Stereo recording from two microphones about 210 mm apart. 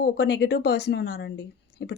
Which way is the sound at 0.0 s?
50° left (ahead or behind).